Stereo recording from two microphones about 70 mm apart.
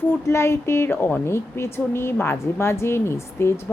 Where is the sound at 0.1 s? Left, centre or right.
Left.